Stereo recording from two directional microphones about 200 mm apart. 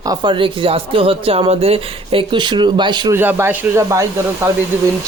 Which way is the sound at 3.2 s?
10° right (ahead or behind).